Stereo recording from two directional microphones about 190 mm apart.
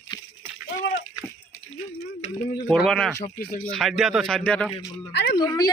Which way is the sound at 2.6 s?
Centre (ahead or behind).